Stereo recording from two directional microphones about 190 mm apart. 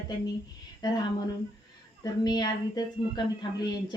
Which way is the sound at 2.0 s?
20° left (ahead or behind).